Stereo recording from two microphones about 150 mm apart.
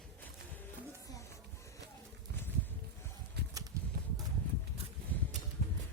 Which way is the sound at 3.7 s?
20° right (ahead or behind).